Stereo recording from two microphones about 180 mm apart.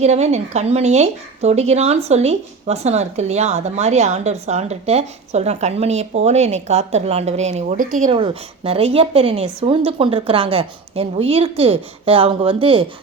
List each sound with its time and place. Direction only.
0.0 s speech: 40° right (ahead or behind)